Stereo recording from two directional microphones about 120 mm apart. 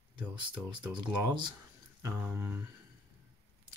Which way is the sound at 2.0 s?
20° right (ahead or behind).